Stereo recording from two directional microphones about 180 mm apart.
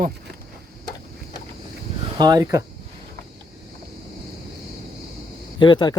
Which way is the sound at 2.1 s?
20° right (ahead or behind).